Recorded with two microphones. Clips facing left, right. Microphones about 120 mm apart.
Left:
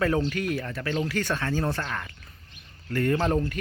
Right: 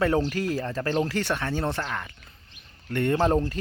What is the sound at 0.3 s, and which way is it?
Speech, 30° right (ahead or behind).